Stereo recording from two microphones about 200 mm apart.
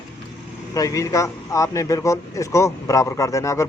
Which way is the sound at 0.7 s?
15° left (ahead or behind).